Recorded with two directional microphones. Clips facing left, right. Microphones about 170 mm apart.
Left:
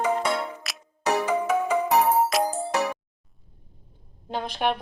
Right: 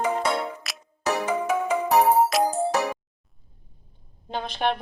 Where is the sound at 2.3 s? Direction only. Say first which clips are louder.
Right 2 dB; centre (ahead or behind).